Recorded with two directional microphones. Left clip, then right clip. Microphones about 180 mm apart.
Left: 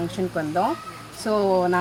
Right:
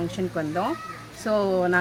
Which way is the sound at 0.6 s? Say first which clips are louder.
Left 4 dB; 15° left (ahead or behind).